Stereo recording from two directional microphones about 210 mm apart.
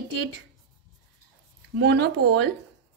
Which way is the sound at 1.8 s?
55° right (ahead or behind).